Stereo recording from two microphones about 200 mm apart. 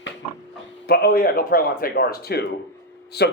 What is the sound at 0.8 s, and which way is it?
A man's voice, 50° left (ahead or behind).